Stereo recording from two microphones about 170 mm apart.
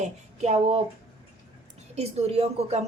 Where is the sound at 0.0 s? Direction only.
40° right (ahead or behind).